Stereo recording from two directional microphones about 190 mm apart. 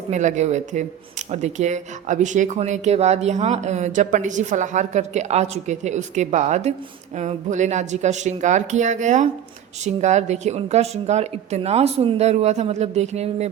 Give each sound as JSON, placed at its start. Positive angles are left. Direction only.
{"t": 0.1, "sound": "speech", "side_deg": -40}